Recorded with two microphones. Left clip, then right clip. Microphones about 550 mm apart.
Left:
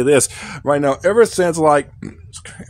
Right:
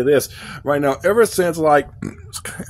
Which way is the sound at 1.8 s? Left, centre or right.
Right.